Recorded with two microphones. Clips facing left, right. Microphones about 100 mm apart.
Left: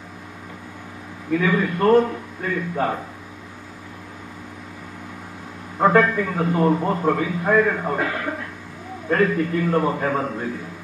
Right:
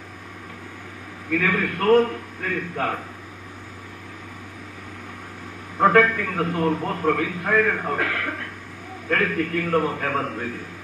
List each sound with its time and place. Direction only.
1.4 s a man's voice: 15° left (ahead or behind)
5.8 s a man's voice: 15° left (ahead or behind)
9.5 s a man's voice: 20° left (ahead or behind)